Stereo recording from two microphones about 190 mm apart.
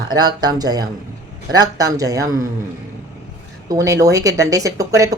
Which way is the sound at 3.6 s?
15° right (ahead or behind).